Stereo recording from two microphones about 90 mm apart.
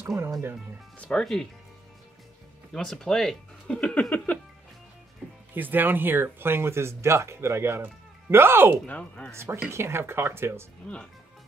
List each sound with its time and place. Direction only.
0.9 s speech: 10° left (ahead or behind)
2.7 s speech: 5° left (ahead or behind)
5.5 s speech: 20° right (ahead or behind)
8.8 s speech: 15° left (ahead or behind)
9.3 s speech: 30° right (ahead or behind)
10.8 s speech: 10° left (ahead or behind)